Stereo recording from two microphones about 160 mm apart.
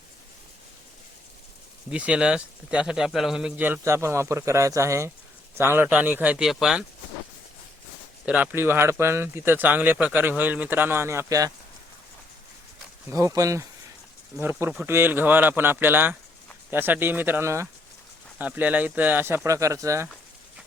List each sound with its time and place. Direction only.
1.9 s speech: 5° right (ahead or behind)
8.2 s speech: 10° right (ahead or behind)
13.1 s speech: 20° right (ahead or behind)